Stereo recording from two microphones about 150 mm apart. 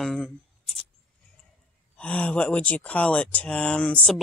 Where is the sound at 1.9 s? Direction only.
10° left (ahead or behind).